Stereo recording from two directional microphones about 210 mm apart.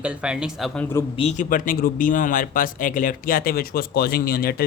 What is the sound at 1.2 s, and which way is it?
Speech, 35° left (ahead or behind).